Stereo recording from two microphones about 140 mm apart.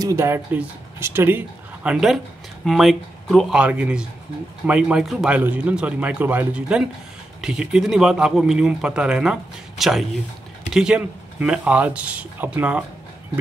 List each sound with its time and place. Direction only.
0.0 s speech: 20° right (ahead or behind)